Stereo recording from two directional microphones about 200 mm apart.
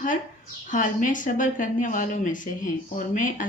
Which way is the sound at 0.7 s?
40° left (ahead or behind).